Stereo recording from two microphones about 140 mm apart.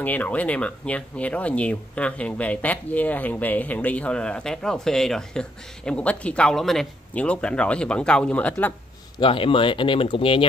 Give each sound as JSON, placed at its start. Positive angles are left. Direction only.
{"t": 0.0, "sound": "speech", "side_deg": 10}
{"t": 9.2, "sound": "speech", "side_deg": 40}